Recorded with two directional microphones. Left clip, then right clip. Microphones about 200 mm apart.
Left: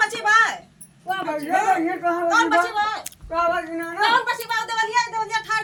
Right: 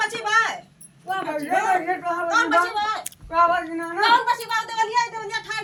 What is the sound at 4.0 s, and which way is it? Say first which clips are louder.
A woman's voice: right 1 dB; 10° left (ahead or behind).